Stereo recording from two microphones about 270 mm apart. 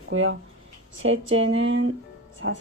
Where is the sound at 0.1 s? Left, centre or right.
Right.